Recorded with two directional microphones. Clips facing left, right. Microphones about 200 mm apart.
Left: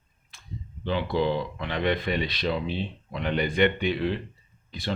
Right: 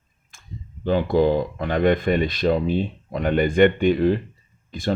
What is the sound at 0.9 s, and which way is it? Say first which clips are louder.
Speech: right 7 dB; 45° right (ahead or behind).